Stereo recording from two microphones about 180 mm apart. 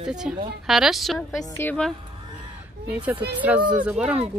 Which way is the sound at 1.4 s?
15° left (ahead or behind).